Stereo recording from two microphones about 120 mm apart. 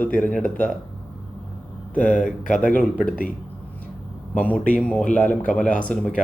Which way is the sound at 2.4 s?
90° left.